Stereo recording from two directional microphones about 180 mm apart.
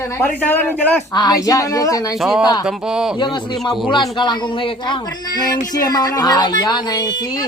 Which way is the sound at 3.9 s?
25° left (ahead or behind).